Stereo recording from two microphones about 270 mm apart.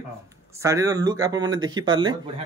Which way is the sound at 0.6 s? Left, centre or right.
Centre.